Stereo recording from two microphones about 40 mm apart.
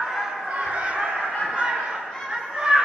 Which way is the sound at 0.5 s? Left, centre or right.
Right.